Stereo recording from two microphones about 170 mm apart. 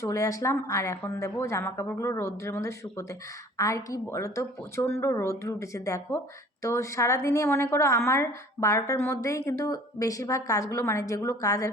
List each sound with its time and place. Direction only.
0.0 s speech: 20° left (ahead or behind)